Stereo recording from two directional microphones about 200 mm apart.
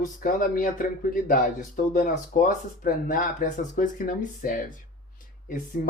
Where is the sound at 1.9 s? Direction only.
40° left (ahead or behind).